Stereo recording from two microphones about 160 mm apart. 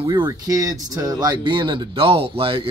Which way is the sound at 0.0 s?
25° right (ahead or behind).